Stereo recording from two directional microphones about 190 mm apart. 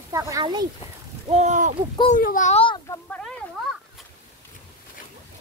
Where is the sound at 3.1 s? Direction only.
5° left (ahead or behind).